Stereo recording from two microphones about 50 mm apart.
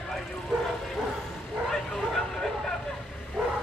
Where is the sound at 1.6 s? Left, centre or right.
Centre.